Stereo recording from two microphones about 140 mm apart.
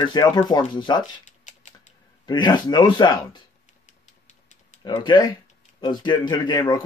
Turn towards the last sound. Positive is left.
turn(degrees=30)  # may be behind; listen again after turning